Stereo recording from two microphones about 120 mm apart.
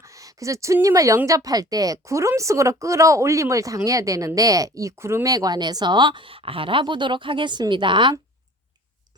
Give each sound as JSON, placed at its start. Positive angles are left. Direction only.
{"t": 0.0, "sound": "a woman's voice", "side_deg": -25}